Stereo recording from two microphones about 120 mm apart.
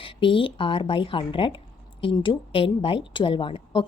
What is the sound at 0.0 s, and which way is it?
A woman's voice, 45° left (ahead or behind).